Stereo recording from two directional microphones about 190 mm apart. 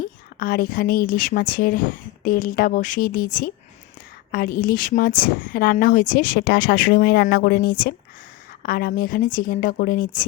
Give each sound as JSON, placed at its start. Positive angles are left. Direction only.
{"t": 0.0, "sound": "a woman's voice", "side_deg": 50}